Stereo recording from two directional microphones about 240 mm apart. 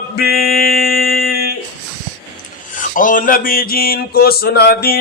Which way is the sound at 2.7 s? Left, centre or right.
Left.